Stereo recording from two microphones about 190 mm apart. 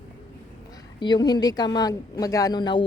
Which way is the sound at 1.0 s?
20° left (ahead or behind).